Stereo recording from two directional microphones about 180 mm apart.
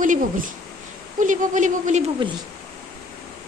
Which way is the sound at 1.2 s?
45° right (ahead or behind).